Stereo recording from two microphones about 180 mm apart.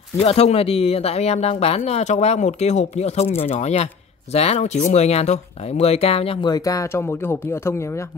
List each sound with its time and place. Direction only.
0.2 s speech: 35° left (ahead or behind); by 8.0 s 15° left (ahead or behind)